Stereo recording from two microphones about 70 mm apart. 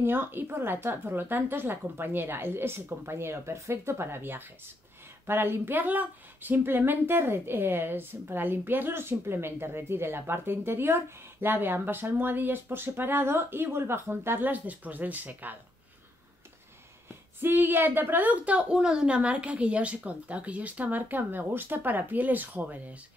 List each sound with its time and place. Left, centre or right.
0.0 s speech: right
17.4 s a woman's voice: right